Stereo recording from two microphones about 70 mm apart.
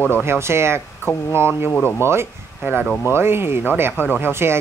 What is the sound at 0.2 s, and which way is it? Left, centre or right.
Speech, right.